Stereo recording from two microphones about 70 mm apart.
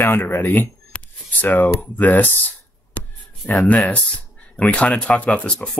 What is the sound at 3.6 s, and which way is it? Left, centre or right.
Speech, centre.